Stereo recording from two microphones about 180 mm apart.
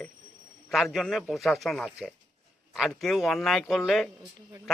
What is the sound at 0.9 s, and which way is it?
A man's voice, centre (ahead or behind).